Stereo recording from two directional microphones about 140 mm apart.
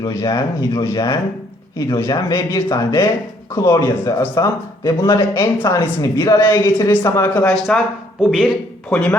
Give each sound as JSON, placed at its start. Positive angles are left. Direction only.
{"t": 0.0, "sound": "speech", "side_deg": 25}
{"t": 7.4, "sound": "speech", "side_deg": 5}
{"t": 8.9, "sound": "speech", "side_deg": 10}